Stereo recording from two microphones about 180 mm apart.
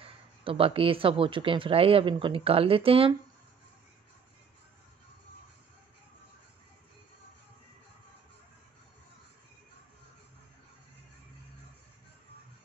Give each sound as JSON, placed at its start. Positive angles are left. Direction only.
{"t": 0.0, "sound": "speech", "side_deg": -30}